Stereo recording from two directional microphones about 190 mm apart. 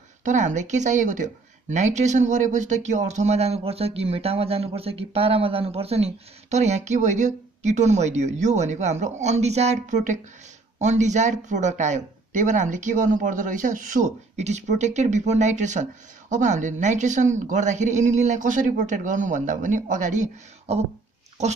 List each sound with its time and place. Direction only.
0.2 s speech: 40° right (ahead or behind)